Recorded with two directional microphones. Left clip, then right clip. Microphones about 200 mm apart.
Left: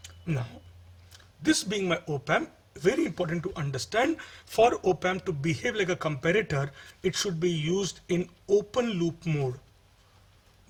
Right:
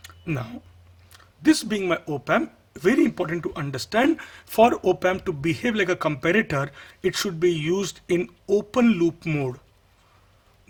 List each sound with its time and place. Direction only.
1.1 s speech: 40° right (ahead or behind)